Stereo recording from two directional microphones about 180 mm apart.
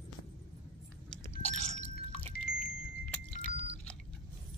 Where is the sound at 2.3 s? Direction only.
55° left (ahead or behind).